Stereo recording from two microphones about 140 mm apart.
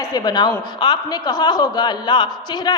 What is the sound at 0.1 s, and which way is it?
Speech, 30° left (ahead or behind).